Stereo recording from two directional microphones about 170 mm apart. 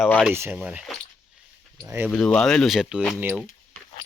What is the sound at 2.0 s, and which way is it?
Speech, 5° left (ahead or behind).